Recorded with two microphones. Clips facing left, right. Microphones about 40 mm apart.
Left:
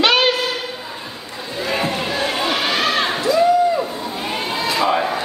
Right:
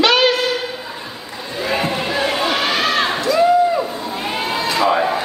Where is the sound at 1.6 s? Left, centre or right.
Centre.